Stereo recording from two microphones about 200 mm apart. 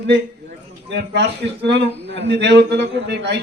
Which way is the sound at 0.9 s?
60° right (ahead or behind).